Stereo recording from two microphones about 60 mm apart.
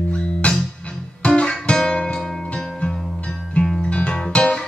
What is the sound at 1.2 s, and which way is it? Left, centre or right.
Guitar, centre.